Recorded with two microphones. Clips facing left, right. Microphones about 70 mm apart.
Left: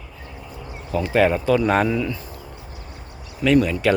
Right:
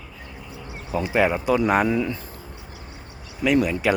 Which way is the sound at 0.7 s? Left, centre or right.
Centre.